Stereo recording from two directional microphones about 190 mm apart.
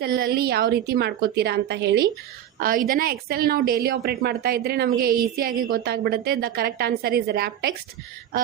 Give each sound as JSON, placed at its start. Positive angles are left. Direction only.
{"t": 0.0, "sound": "a woman's voice", "side_deg": -55}
{"t": 2.6, "sound": "a woman's voice", "side_deg": -50}